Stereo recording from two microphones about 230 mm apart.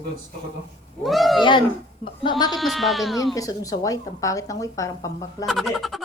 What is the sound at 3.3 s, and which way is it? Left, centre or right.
A woman's voice, centre.